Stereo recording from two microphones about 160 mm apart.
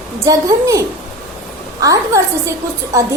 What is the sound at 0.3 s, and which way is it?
A woman's voice, 20° right (ahead or behind).